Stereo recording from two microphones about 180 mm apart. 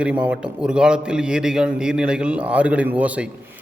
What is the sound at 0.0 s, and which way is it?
A man's voice, 5° right (ahead or behind).